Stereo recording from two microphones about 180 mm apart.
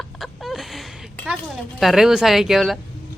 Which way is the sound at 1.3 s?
Centre (ahead or behind).